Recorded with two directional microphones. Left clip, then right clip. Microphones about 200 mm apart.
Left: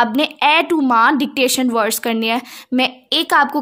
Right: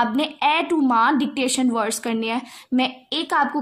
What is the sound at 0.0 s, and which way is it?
A woman's voice, 40° left (ahead or behind).